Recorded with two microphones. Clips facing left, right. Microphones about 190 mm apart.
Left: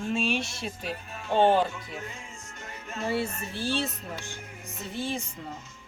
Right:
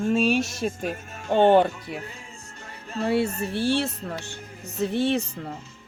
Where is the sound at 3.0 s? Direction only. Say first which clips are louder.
Right 6 dB; 65° right (ahead or behind).